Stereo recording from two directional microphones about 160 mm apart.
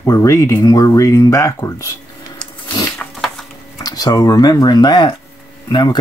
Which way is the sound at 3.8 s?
25° left (ahead or behind).